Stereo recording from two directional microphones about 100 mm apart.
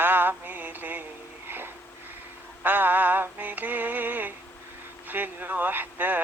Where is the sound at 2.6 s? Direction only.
20° right (ahead or behind).